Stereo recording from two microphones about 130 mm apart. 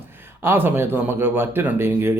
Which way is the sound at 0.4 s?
15° right (ahead or behind).